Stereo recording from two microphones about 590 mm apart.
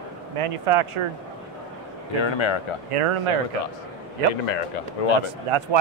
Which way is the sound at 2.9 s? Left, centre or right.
Right.